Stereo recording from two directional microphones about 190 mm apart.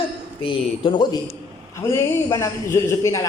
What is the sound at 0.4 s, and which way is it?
Speech, 25° left (ahead or behind).